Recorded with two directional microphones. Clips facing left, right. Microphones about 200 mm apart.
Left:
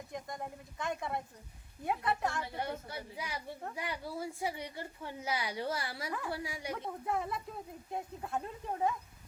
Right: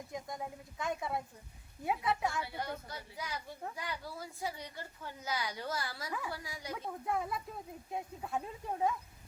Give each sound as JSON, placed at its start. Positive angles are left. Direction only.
{"t": 0.1, "sound": "speech", "side_deg": 0}
{"t": 2.6, "sound": "a woman's voice", "side_deg": 25}
{"t": 6.1, "sound": "speech", "side_deg": 0}
{"t": 6.3, "sound": "a woman's voice", "side_deg": 30}
{"t": 6.7, "sound": "speech", "side_deg": 0}